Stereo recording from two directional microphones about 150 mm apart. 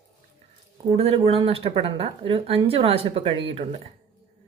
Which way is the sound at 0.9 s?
40° right (ahead or behind).